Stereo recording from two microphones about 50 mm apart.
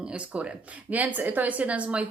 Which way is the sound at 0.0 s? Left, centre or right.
Right.